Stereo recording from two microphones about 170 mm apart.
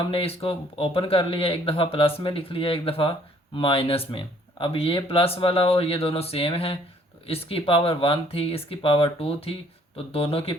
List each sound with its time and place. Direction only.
0.1 s speech: 35° left (ahead or behind)